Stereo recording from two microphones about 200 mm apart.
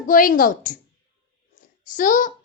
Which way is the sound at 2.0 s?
40° left (ahead or behind).